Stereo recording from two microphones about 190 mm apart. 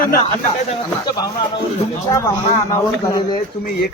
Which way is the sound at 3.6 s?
55° left (ahead or behind).